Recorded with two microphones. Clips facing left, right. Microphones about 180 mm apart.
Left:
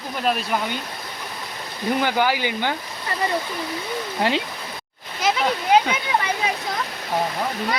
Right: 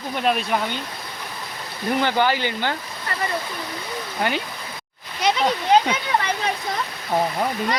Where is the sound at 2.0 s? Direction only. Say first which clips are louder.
Right 1 dB; 10° left (ahead or behind).